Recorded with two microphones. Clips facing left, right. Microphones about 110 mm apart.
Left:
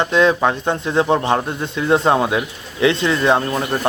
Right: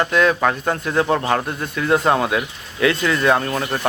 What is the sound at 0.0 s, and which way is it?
Speech, 25° left (ahead or behind).